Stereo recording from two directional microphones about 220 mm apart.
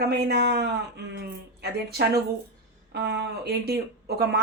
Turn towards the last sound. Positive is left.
turn(degrees=-45)  # may be behind; listen again after turning